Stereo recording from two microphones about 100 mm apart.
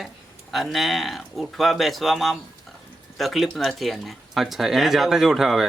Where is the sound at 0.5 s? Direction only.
Centre (ahead or behind).